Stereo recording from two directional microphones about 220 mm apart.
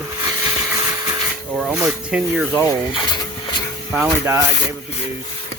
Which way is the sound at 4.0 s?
10° right (ahead or behind).